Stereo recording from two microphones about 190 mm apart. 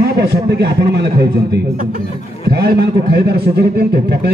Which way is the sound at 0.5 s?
60° right (ahead or behind).